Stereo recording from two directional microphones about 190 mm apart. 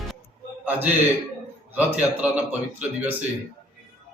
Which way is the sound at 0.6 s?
10° right (ahead or behind).